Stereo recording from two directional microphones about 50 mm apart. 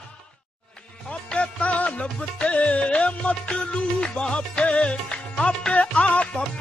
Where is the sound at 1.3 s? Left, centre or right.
Left.